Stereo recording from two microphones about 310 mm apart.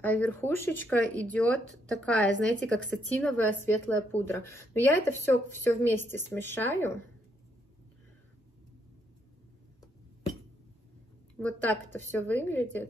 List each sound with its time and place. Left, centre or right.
0.0 s a woman's voice: centre
11.3 s a woman's voice: centre